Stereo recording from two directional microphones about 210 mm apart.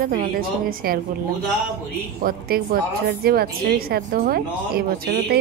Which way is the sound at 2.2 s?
45° right (ahead or behind).